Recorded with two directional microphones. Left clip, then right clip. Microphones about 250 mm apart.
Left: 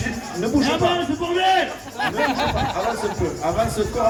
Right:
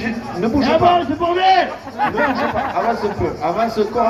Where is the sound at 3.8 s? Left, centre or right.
Left.